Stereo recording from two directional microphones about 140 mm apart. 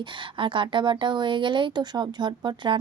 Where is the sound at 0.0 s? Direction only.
35° right (ahead or behind).